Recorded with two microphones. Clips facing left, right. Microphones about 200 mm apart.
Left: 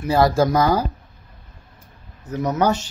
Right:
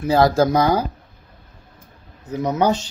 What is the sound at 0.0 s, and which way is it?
Speech, 25° right (ahead or behind).